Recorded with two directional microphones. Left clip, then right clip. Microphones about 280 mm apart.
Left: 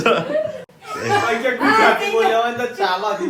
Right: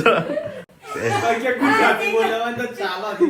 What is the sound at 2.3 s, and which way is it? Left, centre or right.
A man's voice, centre.